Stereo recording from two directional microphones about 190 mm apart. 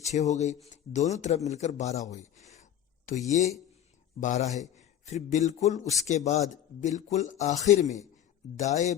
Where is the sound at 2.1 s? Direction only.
35° left (ahead or behind).